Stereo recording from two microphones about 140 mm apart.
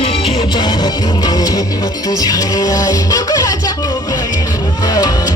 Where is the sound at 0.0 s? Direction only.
40° left (ahead or behind); by 3.5 s 25° left (ahead or behind).